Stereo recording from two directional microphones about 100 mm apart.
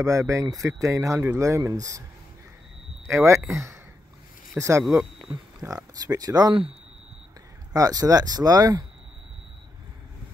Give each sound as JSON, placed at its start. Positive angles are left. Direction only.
{"t": 0.0, "sound": "speech", "side_deg": -35}
{"t": 3.1, "sound": "speech", "side_deg": -30}
{"t": 6.0, "sound": "speech", "side_deg": -40}
{"t": 7.7, "sound": "speech", "side_deg": -40}